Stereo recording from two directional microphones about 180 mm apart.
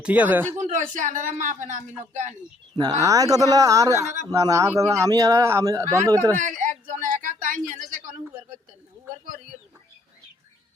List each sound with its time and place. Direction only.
0.0 s speech: 10° right (ahead or behind)
0.6 s speech: 45° right (ahead or behind)
2.7 s speech: 25° right (ahead or behind)
6.3 s a sound: 45° right (ahead or behind)